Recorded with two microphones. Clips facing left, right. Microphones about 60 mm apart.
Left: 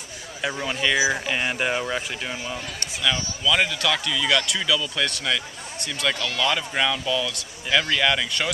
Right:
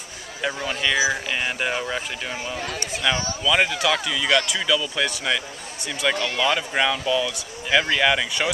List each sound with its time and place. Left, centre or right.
0.7 s speech: centre
2.8 s speech: right; by 8.5 s centre